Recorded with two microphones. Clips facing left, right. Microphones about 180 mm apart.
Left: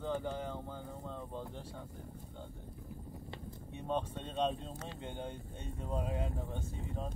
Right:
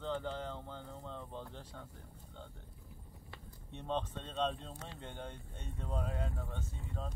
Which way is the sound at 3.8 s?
10° left (ahead or behind).